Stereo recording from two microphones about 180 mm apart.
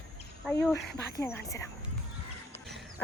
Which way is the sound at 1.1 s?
15° left (ahead or behind).